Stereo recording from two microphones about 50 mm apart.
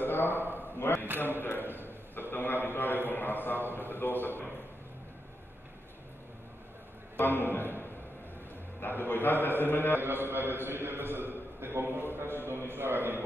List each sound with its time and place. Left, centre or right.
0.0 s a sound: left
1.6 s a man's voice: right
2.3 s a man's voice: left
7.2 s a man's voice: left
8.8 s a man's voice: left
9.9 s a man's voice: right